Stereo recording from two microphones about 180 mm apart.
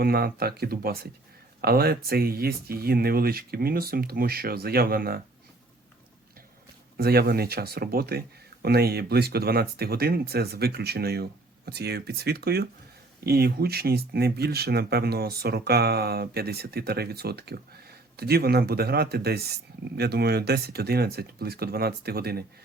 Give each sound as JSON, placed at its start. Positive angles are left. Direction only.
{"t": 0.0, "sound": "speech", "side_deg": -60}
{"t": 6.9, "sound": "speech", "side_deg": -60}